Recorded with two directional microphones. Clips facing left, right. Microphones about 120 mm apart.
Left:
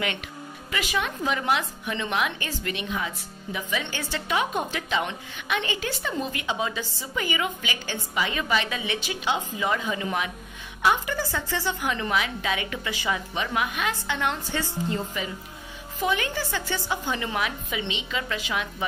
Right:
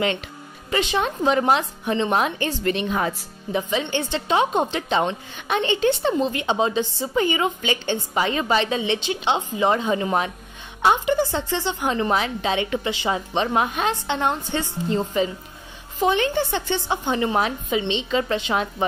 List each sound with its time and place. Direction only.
0.7 s a woman's voice: 30° right (ahead or behind)
3.9 s a woman's voice: 25° right (ahead or behind)
10.8 s a woman's voice: 25° right (ahead or behind)